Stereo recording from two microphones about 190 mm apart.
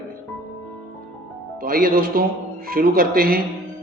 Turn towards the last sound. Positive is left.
turn(degrees=-50)  # may be behind; listen again after turning